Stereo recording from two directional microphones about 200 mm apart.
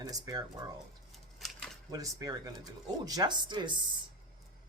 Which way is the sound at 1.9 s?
15° right (ahead or behind).